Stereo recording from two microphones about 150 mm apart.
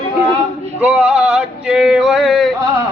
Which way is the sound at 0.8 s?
5° right (ahead or behind).